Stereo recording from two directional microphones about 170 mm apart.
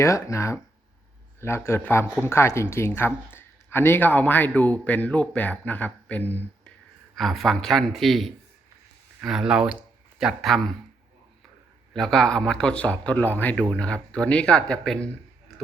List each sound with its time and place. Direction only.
0.0 s a man's voice: 15° left (ahead or behind); by 10.7 s centre (ahead or behind)
11.9 s speech: 5° left (ahead or behind)